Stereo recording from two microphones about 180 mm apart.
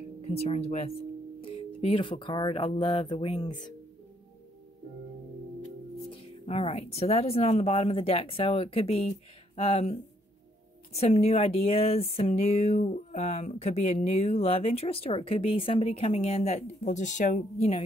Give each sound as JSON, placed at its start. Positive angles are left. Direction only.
{"t": 0.2, "sound": "speech", "side_deg": 35}
{"t": 5.9, "sound": "speech", "side_deg": 35}